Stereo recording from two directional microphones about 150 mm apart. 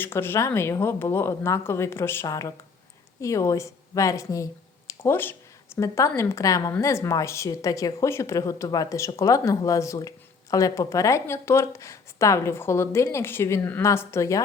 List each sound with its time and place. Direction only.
0.0 s a woman's voice: 15° left (ahead or behind)